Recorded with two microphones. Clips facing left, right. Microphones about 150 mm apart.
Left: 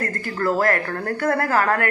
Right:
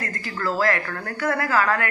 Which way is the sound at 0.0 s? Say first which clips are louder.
Left 4 dB; 50° left (ahead or behind).